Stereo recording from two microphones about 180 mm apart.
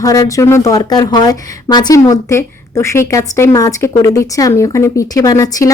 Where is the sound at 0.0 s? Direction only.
20° left (ahead or behind).